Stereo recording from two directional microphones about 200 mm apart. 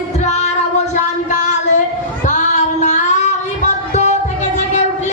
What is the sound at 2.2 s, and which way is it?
Child singing, 35° left (ahead or behind).